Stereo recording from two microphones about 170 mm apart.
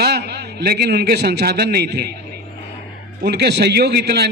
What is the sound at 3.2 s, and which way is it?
A man's voice, 75° right (ahead or behind).